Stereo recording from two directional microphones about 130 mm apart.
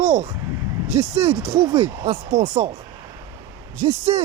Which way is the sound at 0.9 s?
55° right (ahead or behind).